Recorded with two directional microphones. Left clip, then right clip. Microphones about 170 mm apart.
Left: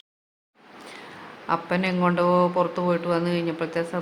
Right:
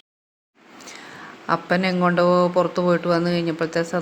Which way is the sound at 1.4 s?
30° right (ahead or behind).